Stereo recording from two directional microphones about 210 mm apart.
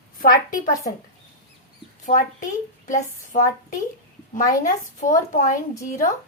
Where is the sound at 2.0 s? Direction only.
35° left (ahead or behind).